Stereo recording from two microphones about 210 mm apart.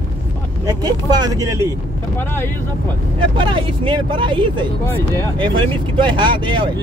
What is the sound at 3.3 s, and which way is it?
Speech, 25° right (ahead or behind).